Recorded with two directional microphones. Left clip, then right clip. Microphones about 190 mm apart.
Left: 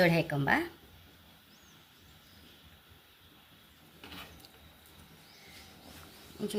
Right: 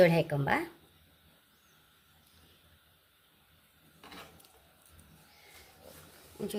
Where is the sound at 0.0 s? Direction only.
40° right (ahead or behind).